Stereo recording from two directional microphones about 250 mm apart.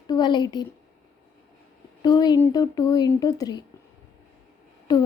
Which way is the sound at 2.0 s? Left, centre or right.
Centre.